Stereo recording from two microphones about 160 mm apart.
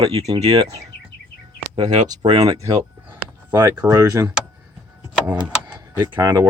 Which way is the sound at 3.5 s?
25° right (ahead or behind).